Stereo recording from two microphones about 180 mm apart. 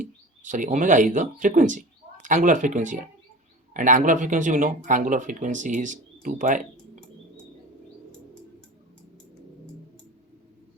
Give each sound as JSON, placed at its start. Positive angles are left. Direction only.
{"t": 0.0, "sound": "speech", "side_deg": -45}